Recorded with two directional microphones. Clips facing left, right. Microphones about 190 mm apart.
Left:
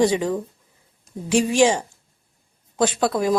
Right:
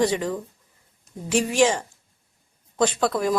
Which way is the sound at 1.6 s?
10° left (ahead or behind).